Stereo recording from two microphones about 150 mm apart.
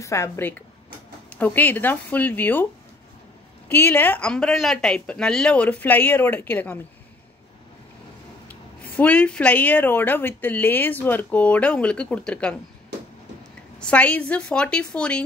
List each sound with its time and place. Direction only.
0.0 s speech: 20° left (ahead or behind)
8.9 s speech: 10° left (ahead or behind)
13.7 s speech: 10° left (ahead or behind)